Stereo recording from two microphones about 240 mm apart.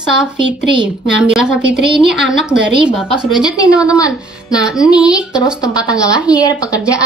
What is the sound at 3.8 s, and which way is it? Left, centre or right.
Speech, centre.